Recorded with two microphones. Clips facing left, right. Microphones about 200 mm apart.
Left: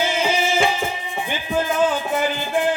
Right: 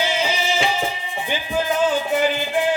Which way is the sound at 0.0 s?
50° left (ahead or behind).